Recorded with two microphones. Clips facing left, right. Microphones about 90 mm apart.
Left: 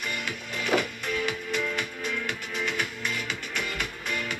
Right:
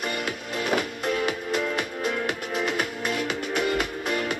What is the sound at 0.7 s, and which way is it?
Music, 40° right (ahead or behind).